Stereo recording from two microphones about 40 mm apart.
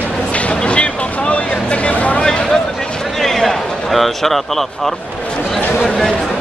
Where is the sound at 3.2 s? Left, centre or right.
Centre.